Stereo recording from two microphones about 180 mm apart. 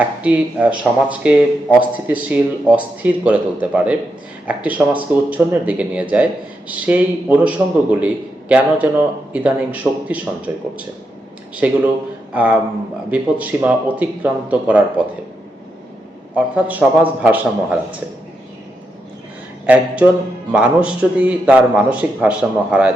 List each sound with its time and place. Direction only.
0.2 s speech: 5° right (ahead or behind)
16.3 s speech: 10° right (ahead or behind)
19.6 s speech: 10° right (ahead or behind)